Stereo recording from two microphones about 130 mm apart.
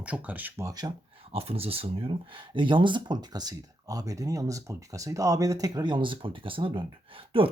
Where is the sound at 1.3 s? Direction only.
50° right (ahead or behind).